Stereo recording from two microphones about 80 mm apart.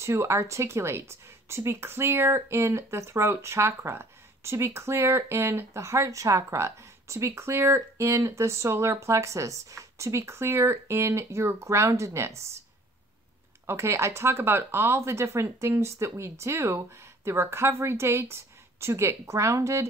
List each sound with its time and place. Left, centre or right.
0.0 s speech: right
13.7 s speech: right